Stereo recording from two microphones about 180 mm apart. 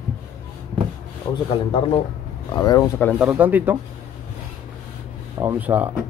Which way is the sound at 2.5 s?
20° left (ahead or behind).